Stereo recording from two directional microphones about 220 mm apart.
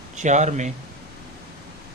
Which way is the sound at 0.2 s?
35° right (ahead or behind).